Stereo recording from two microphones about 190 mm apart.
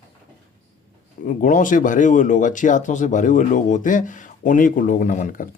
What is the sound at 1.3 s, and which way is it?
Speech, 40° left (ahead or behind).